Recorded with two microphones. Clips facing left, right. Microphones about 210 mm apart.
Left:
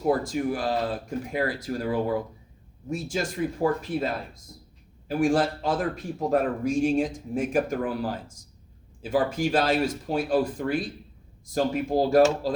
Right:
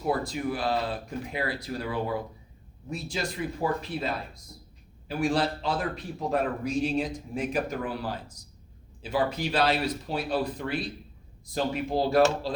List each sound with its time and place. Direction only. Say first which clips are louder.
0.0 s a man's voice: left 4 dB; 45° left (ahead or behind)